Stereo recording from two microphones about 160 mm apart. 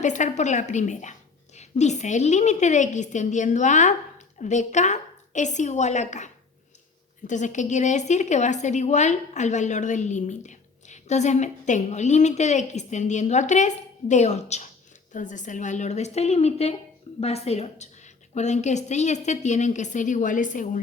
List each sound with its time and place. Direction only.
0.0 s a woman's voice: 50° left (ahead or behind)